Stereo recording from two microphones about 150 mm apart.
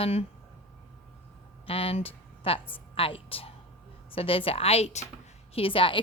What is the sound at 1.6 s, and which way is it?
A woman's voice, 40° left (ahead or behind).